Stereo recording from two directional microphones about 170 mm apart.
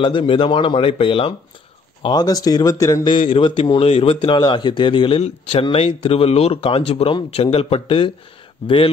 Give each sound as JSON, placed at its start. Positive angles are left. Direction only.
{"t": 0.0, "sound": "a man's voice", "side_deg": 30}